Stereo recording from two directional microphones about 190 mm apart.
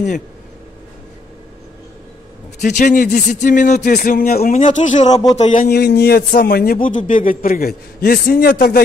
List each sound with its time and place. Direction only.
2.6 s a man's voice: 45° left (ahead or behind)